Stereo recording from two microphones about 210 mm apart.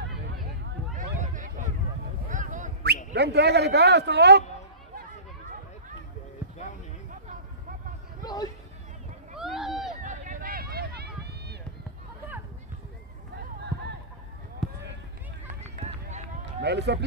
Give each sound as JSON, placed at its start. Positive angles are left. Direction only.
{"t": 0.9, "sound": "a sound", "side_deg": -35}
{"t": 3.1, "sound": "a man's voice", "side_deg": -50}
{"t": 8.2, "sound": "a sound", "side_deg": 20}
{"t": 9.4, "sound": "rowboat", "side_deg": 0}
{"t": 10.0, "sound": "run", "side_deg": -40}
{"t": 14.6, "sound": "run", "side_deg": 0}
{"t": 15.4, "sound": "run", "side_deg": -35}
{"t": 16.6, "sound": "a man's voice", "side_deg": -55}